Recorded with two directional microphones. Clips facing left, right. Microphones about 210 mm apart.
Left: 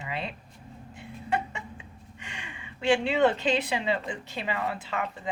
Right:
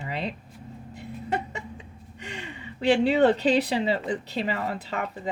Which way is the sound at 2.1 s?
40° right (ahead or behind).